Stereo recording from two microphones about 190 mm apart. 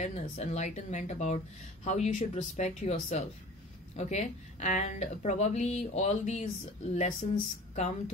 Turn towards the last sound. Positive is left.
turn(degrees=40)  # may be behind; listen again after turning